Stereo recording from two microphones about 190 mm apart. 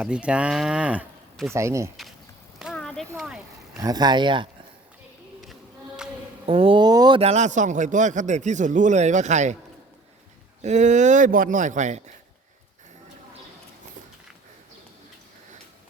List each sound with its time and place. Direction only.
0.0 s speech: 5° right (ahead or behind)
1.5 s speech: 15° right (ahead or behind)
2.6 s a sound: centre (ahead or behind)
3.8 s speech: 20° right (ahead or behind)
6.4 s a man's voice: 30° right (ahead or behind)
10.6 s a man's voice: 40° right (ahead or behind)